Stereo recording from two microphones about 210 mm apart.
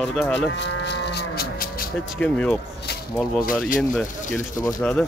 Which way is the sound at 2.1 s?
5° left (ahead or behind).